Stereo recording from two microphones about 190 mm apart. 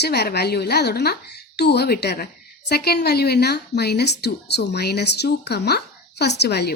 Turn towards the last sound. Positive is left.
turn(degrees=60)  # may be behind; listen again after turning